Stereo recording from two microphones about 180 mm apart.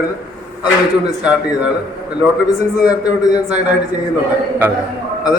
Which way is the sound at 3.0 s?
20° left (ahead or behind).